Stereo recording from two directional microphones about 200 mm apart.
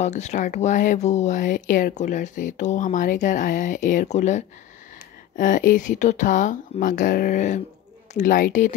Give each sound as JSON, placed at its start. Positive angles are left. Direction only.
{"t": 0.0, "sound": "speech", "side_deg": 35}